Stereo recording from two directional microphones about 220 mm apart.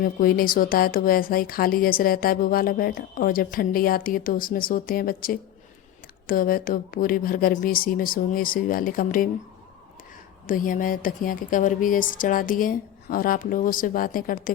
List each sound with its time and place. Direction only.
0.0 s speech: 40° left (ahead or behind)
10.4 s speech: 40° left (ahead or behind)